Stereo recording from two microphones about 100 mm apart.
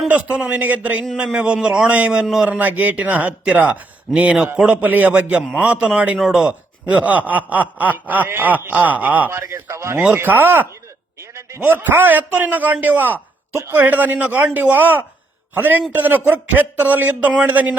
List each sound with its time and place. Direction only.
0.1 s speech: 10° right (ahead or behind)
2.6 s speech: 15° right (ahead or behind)
9.4 s speech: 30° right (ahead or behind)